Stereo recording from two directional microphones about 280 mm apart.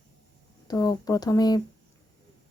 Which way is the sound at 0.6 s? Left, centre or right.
Centre.